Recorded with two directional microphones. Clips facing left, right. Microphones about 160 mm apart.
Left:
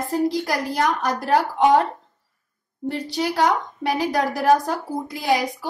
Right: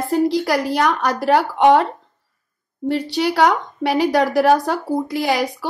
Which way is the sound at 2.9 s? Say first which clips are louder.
Right 5 dB; 75° right (ahead or behind).